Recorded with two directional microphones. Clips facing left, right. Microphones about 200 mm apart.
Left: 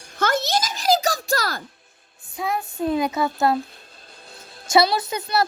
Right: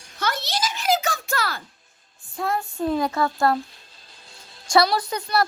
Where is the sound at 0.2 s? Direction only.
45° left (ahead or behind).